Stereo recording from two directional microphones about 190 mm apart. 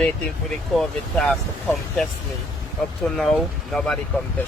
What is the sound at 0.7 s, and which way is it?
Speech, centre (ahead or behind).